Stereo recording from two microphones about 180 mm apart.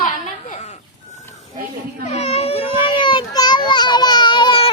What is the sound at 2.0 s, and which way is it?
Baby cry, 35° left (ahead or behind).